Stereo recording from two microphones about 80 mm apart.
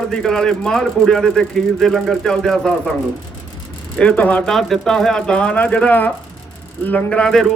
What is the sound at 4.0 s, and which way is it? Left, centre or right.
Speech, centre.